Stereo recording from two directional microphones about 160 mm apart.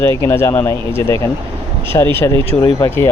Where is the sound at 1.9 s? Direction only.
30° left (ahead or behind).